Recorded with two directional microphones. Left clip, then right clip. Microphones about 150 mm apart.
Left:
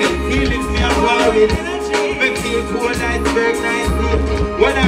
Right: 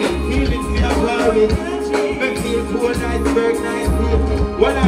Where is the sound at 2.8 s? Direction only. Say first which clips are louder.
Left 1 dB; 25° left (ahead or behind).